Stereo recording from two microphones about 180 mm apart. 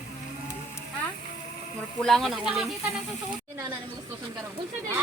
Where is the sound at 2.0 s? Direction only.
Centre (ahead or behind).